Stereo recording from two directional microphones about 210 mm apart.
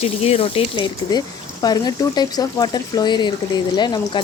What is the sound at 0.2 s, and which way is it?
Speech, 30° left (ahead or behind).